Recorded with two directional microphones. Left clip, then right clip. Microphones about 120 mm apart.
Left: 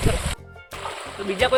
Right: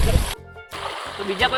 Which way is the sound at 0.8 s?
75° right (ahead or behind).